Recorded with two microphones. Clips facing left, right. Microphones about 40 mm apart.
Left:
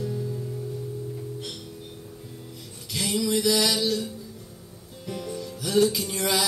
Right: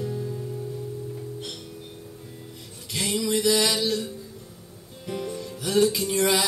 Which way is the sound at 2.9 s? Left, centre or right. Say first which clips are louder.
Even; centre.